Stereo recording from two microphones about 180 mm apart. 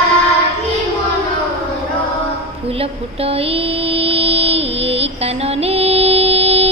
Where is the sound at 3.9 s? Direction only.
35° right (ahead or behind).